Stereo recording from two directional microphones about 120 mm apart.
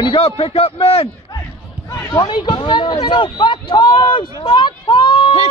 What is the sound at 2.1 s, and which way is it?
Speech, 40° left (ahead or behind).